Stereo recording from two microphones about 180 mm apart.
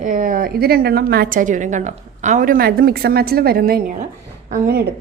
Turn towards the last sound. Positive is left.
turn(degrees=-60)  # may be behind; listen again after turning